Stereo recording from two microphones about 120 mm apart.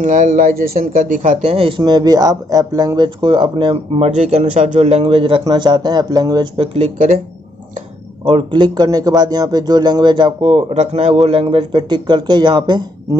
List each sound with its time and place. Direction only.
0.0 s speech: 90° right
1.5 s speech: 50° right (ahead or behind)
1.8 s speech: 35° right (ahead or behind)
4.1 s a man's voice: 70° right (ahead or behind); by 6.7 s 40° right (ahead or behind)
6.7 s speech: 75° right (ahead or behind)
8.3 s speech: 45° right (ahead or behind)
10.7 s speech: 65° right (ahead or behind); by 13.2 s 35° right (ahead or behind)